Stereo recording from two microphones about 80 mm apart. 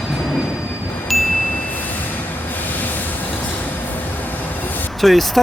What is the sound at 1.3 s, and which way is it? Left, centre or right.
Train, left.